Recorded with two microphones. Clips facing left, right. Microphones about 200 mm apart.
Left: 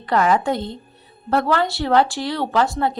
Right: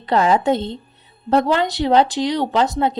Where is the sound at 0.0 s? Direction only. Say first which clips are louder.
Right 2 dB; 25° right (ahead or behind).